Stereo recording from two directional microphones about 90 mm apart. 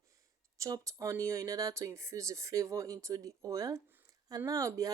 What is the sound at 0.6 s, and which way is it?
Speech, 40° right (ahead or behind).